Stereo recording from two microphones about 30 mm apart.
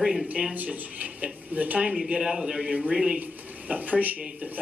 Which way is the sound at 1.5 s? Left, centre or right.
Right.